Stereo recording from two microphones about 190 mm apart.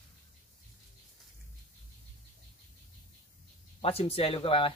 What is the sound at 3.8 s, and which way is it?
Speech, 30° left (ahead or behind).